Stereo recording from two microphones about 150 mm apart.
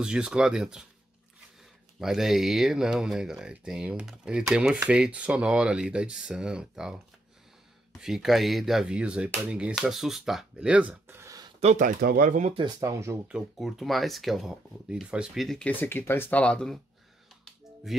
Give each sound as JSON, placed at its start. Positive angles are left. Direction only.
{"t": 0.0, "sound": "speech", "side_deg": -5}
{"t": 2.0, "sound": "speech", "side_deg": 0}
{"t": 8.0, "sound": "speech", "side_deg": 0}
{"t": 11.6, "sound": "speech", "side_deg": -60}
{"t": 12.5, "sound": "speech", "side_deg": -25}
{"t": 13.3, "sound": "speech", "side_deg": 0}
{"t": 17.9, "sound": "speech", "side_deg": 0}